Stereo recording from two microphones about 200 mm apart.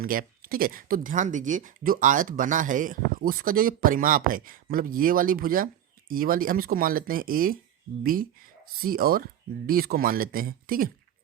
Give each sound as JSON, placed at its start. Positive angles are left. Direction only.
{"t": 0.0, "sound": "speech", "side_deg": -45}